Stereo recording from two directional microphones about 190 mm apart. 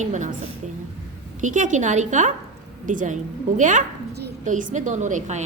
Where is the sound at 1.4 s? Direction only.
40° right (ahead or behind).